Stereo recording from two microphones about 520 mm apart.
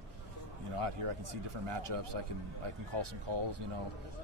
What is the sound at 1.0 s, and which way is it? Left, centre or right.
A man's voice, right.